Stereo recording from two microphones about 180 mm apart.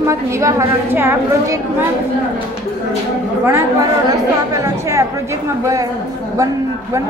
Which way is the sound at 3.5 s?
15° right (ahead or behind).